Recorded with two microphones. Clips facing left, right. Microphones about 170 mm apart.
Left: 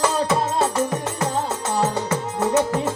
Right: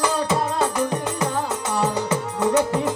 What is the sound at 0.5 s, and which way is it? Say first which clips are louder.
Music: left 1 dB; 25° left (ahead or behind).